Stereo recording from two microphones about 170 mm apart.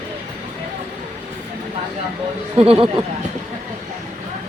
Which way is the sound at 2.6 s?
35° right (ahead or behind).